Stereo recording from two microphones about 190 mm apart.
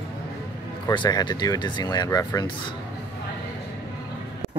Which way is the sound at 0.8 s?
25° left (ahead or behind).